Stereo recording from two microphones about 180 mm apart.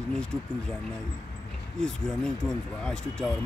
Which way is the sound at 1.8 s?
5° left (ahead or behind).